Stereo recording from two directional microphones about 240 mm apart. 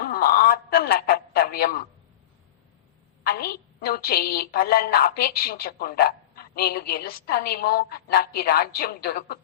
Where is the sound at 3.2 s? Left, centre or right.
Left.